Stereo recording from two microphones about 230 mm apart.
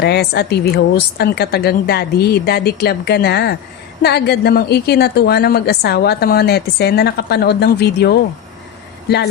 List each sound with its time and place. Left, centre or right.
0.0 s a woman's voice: left